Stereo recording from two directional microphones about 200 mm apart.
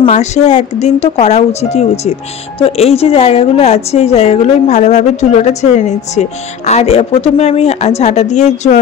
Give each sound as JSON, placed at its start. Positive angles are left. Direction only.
{"t": 0.0, "sound": "a woman's voice", "side_deg": 35}